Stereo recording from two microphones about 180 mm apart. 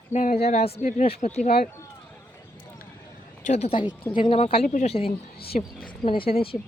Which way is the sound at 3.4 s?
40° left (ahead or behind).